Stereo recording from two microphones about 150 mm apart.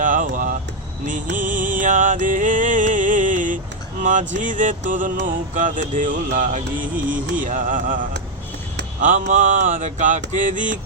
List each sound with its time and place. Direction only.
0.0 s a sound: 65° right (ahead or behind)
1.0 s music: 60° right (ahead or behind)
9.0 s music: 55° right (ahead or behind)